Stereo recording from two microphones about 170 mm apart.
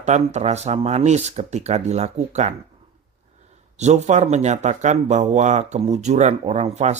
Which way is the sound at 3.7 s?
40° right (ahead or behind).